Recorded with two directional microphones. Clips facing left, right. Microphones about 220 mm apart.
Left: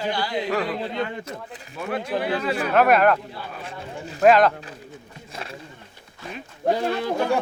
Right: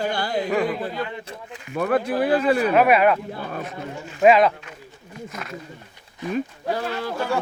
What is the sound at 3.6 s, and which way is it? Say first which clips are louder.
Speech: right 3 dB; 30° left (ahead or behind).